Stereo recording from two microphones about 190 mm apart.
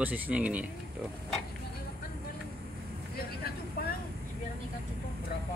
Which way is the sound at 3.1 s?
55° left (ahead or behind).